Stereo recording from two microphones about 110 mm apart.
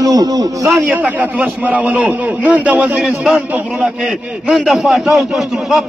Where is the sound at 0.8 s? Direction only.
10° right (ahead or behind).